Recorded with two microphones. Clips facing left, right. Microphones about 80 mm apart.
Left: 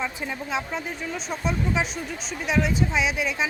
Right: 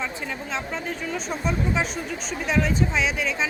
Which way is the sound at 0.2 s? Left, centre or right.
Centre.